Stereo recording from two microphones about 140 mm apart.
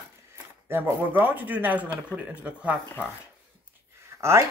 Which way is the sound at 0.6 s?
15° right (ahead or behind).